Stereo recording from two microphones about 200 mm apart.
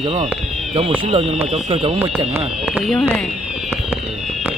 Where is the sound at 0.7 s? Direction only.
25° right (ahead or behind).